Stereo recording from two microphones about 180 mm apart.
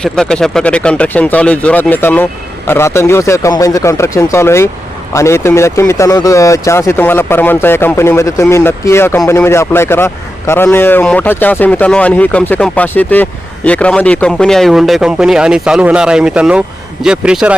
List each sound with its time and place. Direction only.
0.0 s a man's voice: 5° left (ahead or behind)